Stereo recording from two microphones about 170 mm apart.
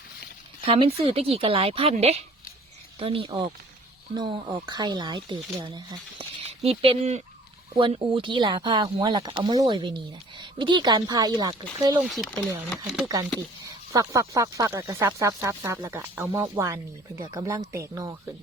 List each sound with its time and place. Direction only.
0.6 s speech: 35° right (ahead or behind)
6.4 s speech: 40° right (ahead or behind)
12.0 s speech: centre (ahead or behind)
13.7 s speech: 20° right (ahead or behind)